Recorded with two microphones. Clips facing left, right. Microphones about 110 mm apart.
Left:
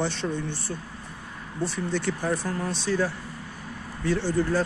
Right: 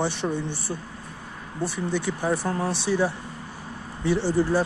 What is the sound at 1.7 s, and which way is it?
Speech, 10° right (ahead or behind).